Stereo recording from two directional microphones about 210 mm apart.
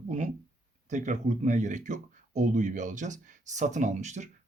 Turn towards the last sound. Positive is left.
turn(degrees=-35)  # may be behind; listen again after turning